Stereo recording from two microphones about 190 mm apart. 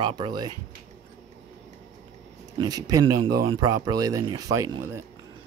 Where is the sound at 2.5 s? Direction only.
20° right (ahead or behind).